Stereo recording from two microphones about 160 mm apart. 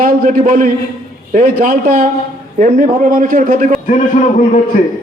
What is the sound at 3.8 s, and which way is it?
Speech, 50° left (ahead or behind).